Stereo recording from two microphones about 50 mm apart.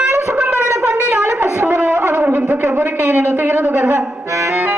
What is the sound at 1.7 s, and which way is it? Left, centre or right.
Wind instrument, right.